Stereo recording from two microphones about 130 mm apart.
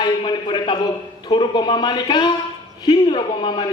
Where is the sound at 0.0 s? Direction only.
40° left (ahead or behind).